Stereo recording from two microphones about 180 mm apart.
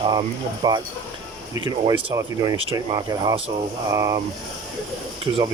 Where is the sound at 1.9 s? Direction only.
20° right (ahead or behind).